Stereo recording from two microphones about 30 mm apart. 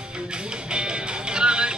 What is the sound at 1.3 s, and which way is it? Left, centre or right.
Music, right.